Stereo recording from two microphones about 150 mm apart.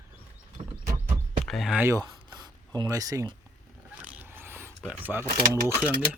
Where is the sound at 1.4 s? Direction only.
Centre (ahead or behind).